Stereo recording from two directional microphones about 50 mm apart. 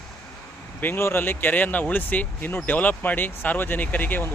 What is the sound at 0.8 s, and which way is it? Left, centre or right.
Speech, left.